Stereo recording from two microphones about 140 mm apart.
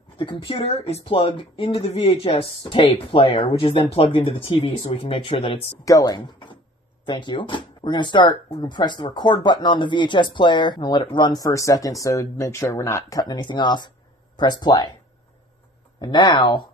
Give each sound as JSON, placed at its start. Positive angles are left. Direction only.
{"t": 0.2, "sound": "speech", "side_deg": 35}
{"t": 5.9, "sound": "speech", "side_deg": 25}
{"t": 16.0, "sound": "speech", "side_deg": 30}